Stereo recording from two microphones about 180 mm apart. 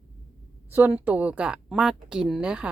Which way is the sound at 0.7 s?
10° right (ahead or behind).